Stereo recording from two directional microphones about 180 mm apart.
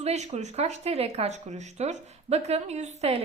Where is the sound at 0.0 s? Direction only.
35° right (ahead or behind).